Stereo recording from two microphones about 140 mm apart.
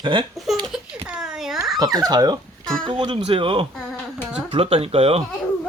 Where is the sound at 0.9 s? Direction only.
10° right (ahead or behind).